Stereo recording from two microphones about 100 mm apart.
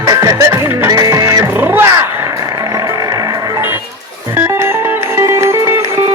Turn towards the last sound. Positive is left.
turn(degrees=-30)  # may be behind; listen again after turning